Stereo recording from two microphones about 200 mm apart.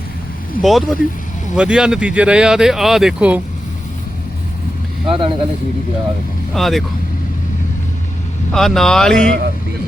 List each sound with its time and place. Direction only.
0.6 s speech: centre (ahead or behind)
5.0 s speech: 25° right (ahead or behind)
6.5 s speech: centre (ahead or behind)
8.5 s speech: centre (ahead or behind)